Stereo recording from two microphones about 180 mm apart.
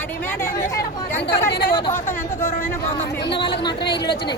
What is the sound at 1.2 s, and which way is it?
Speech, 60° left (ahead or behind).